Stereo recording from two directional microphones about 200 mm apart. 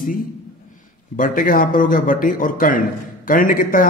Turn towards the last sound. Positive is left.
turn(degrees=45)  # may be behind; listen again after turning